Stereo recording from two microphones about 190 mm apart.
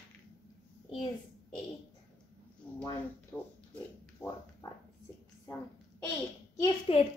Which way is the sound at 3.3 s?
5° left (ahead or behind).